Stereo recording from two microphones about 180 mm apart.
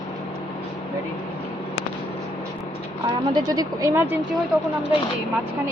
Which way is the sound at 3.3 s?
20° right (ahead or behind).